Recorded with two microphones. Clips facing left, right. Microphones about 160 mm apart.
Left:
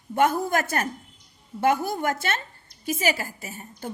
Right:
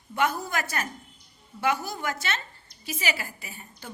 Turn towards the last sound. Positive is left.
turn(degrees=45)  # may be behind; listen again after turning